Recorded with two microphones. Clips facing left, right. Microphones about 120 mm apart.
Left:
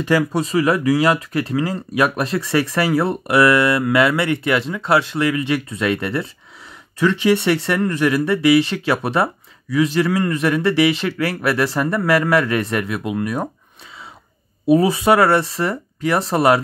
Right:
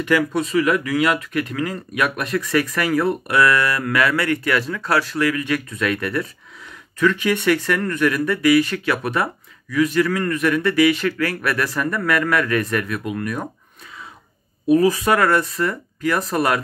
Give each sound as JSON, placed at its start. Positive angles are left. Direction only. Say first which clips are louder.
{"t": 0.0, "sound": "speech", "louder": "left 1 dB", "side_deg": 35}
{"t": 14.7, "sound": "speech", "louder": "left 2 dB", "side_deg": 25}